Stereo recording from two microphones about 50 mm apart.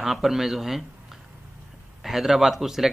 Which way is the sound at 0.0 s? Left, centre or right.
Centre.